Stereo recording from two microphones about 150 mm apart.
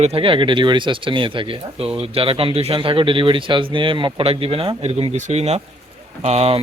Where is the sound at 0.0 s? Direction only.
40° right (ahead or behind).